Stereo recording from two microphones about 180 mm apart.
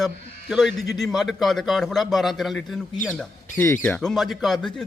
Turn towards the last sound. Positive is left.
turn(degrees=0)  # may be behind; listen again after turning